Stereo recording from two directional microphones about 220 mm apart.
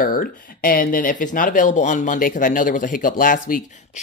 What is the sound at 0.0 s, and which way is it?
Speech, 40° left (ahead or behind).